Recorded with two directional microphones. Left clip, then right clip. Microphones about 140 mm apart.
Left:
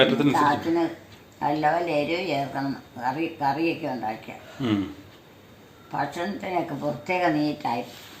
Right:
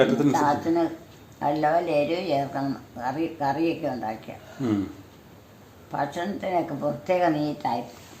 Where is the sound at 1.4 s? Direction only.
25° right (ahead or behind).